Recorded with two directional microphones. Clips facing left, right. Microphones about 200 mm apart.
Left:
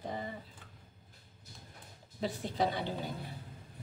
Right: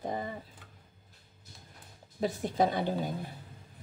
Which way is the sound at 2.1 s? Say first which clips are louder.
Right 5 dB; 45° right (ahead or behind).